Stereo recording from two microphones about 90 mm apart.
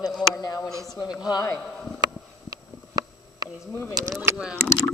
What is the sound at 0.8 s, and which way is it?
Speech, 45° left (ahead or behind).